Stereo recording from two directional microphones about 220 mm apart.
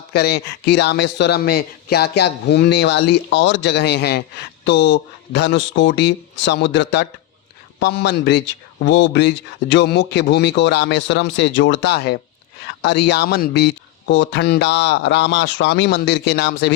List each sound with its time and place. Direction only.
0.1 s speech: 45° left (ahead or behind)